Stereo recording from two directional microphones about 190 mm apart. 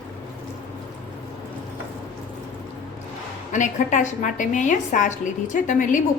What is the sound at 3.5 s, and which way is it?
A woman's voice, 40° left (ahead or behind).